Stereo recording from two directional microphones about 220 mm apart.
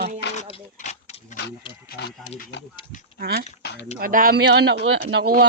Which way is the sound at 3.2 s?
45° right (ahead or behind).